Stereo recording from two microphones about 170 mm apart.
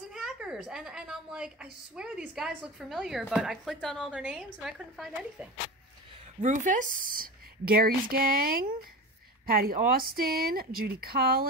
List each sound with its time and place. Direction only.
0.1 s a woman's voice: 5° right (ahead or behind)
6.4 s a woman's voice: 45° right (ahead or behind); by 11.4 s 65° right (ahead or behind)